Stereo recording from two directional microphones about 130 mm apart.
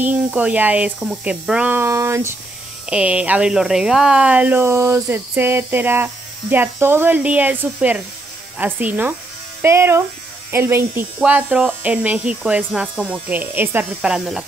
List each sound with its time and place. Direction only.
0.0 s speech: 10° right (ahead or behind)
2.9 s speech: 10° right (ahead or behind)
14.0 s speech: 5° right (ahead or behind)